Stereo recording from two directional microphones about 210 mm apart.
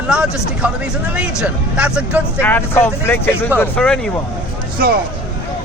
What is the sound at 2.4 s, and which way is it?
Speech, 10° left (ahead or behind).